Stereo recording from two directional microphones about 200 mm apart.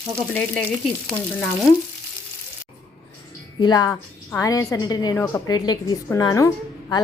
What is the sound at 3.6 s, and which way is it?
A woman's voice, 20° left (ahead or behind).